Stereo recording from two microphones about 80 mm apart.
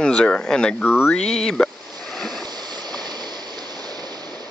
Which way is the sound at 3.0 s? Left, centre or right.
Right.